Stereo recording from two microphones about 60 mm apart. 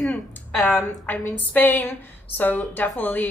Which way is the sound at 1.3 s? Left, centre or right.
Left.